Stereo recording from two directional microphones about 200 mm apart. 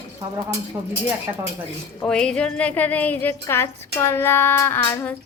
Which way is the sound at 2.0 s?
5° left (ahead or behind).